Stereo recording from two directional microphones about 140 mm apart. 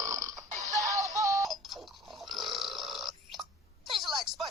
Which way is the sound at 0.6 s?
25° right (ahead or behind).